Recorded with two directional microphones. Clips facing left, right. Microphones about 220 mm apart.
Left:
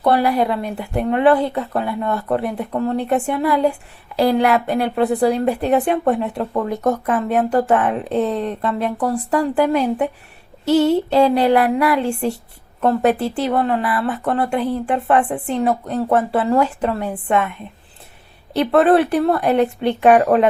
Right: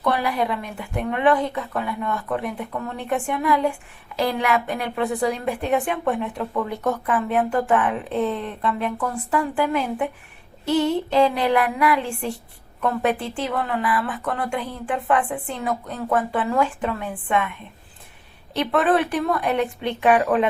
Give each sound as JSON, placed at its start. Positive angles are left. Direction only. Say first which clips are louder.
{"t": 0.0, "sound": "a woman's voice", "louder": "left 6 dB", "side_deg": 35}
{"t": 18.5, "sound": "a woman's voice", "louder": "left 6 dB", "side_deg": 35}